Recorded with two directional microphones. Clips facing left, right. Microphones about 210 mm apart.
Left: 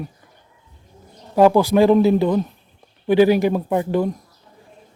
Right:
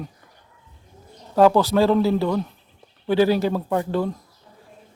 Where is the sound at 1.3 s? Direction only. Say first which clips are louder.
Left 3 dB; 15° left (ahead or behind).